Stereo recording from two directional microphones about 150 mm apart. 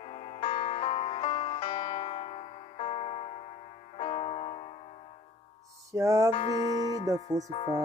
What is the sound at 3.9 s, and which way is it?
Keyboard, 40° left (ahead or behind).